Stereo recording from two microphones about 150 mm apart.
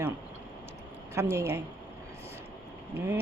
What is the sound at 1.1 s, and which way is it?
Speech, 15° right (ahead or behind).